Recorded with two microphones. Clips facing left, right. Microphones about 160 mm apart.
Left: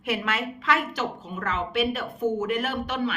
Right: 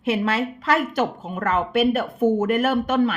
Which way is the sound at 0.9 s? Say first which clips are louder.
Right 7 dB; 55° right (ahead or behind).